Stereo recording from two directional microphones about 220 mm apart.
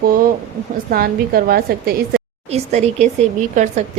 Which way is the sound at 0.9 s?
45° right (ahead or behind).